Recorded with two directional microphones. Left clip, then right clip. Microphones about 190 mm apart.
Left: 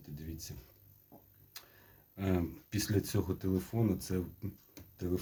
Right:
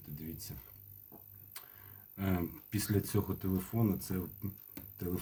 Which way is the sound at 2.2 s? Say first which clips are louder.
Left 2 dB; 25° left (ahead or behind).